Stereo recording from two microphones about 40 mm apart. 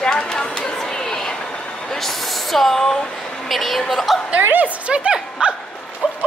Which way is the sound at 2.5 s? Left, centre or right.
Centre.